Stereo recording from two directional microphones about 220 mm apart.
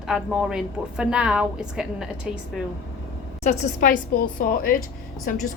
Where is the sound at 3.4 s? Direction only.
40° left (ahead or behind).